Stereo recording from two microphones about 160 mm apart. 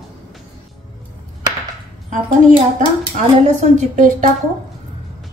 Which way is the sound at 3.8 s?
50° right (ahead or behind).